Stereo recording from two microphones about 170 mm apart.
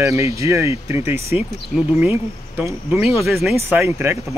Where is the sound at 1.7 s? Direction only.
45° left (ahead or behind).